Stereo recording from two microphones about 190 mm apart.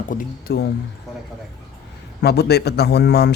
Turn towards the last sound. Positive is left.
turn(degrees=60)  # may be behind; listen again after turning